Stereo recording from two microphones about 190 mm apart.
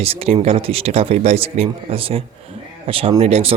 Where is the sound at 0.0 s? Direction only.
30° right (ahead or behind).